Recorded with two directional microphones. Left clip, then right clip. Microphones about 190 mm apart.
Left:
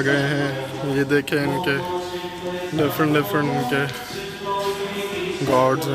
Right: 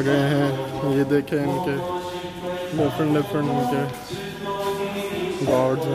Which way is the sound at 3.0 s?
Centre (ahead or behind).